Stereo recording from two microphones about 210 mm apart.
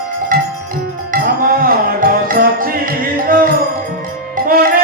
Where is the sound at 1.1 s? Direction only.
40° right (ahead or behind).